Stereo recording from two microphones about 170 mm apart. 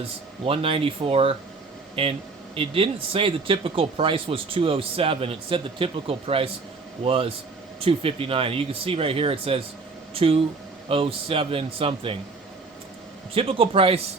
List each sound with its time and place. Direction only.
0.4 s speech: 35° right (ahead or behind)
13.3 s speech: 35° right (ahead or behind)